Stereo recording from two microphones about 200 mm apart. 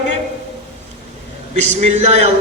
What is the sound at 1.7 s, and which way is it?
Speech, 30° right (ahead or behind).